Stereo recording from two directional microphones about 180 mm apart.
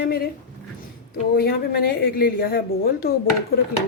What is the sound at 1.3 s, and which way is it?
A woman's voice, 60° left (ahead or behind).